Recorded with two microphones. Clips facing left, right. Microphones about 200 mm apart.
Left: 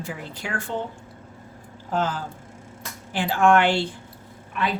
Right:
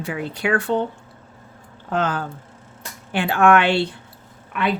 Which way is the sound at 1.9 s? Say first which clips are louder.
Right 3 dB; 65° right (ahead or behind).